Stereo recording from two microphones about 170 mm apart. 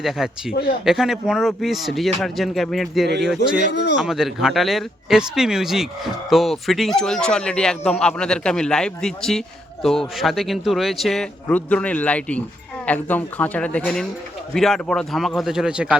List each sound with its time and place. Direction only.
0.0 s speech: centre (ahead or behind)
0.5 s speech: 65° left (ahead or behind)
0.9 s speech: centre (ahead or behind)
3.7 s speech: 90° left
3.9 s a man's voice: centre (ahead or behind)